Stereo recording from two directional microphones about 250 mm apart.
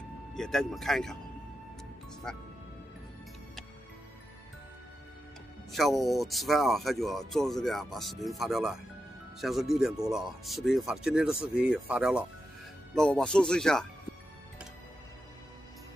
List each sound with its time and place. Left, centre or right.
0.3 s speech: centre
2.3 s speech: centre
5.7 s speech: centre